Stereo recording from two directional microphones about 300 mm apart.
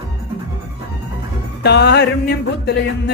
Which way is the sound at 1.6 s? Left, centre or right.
Left.